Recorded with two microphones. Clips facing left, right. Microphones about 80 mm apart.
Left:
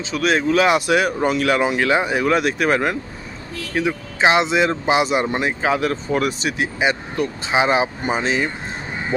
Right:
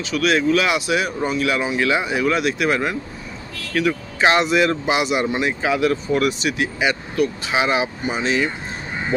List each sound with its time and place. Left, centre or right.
0.0 s speech: left
1.9 s speech: left
3.7 s speech: left